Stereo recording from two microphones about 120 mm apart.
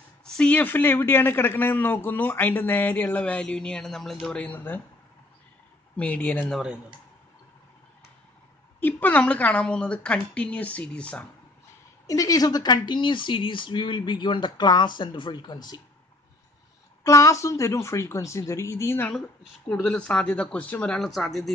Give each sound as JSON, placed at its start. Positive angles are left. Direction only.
{"t": 0.2, "sound": "a man's voice", "side_deg": 10}
{"t": 5.9, "sound": "a man's voice", "side_deg": 10}
{"t": 6.5, "sound": "speech", "side_deg": -5}
{"t": 8.7, "sound": "a man's voice", "side_deg": 15}
{"t": 12.1, "sound": "speech", "side_deg": 30}
{"t": 17.0, "sound": "speech", "side_deg": 25}
{"t": 19.7, "sound": "a man's voice", "side_deg": 5}